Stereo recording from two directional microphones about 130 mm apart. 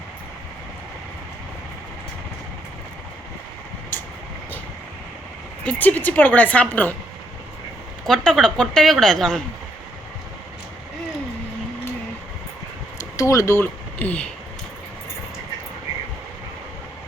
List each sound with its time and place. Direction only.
5.6 s a woman's voice: 15° left (ahead or behind)
8.0 s a woman's voice: 5° left (ahead or behind)
13.0 s speech: 25° left (ahead or behind)